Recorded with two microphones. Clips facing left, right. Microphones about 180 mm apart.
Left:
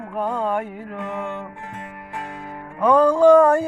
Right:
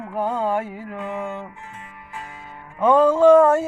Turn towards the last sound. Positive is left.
turn(degrees=-5)  # may be behind; listen again after turning